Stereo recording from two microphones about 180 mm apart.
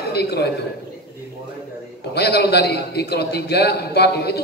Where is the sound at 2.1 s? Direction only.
65° left (ahead or behind).